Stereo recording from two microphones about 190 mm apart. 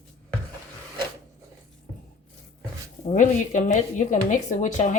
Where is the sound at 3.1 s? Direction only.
40° left (ahead or behind).